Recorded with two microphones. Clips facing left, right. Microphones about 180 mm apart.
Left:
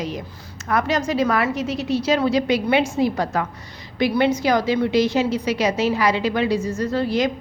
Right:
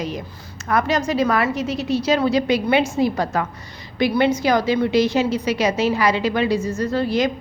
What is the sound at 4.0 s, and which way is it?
A woman's voice, 55° right (ahead or behind).